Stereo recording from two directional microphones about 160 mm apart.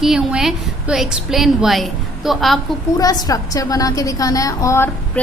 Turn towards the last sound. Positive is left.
turn(degrees=15)  # may be behind; listen again after turning